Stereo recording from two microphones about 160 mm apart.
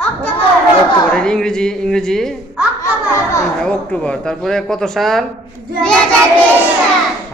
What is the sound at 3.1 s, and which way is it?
Children playing, 20° left (ahead or behind).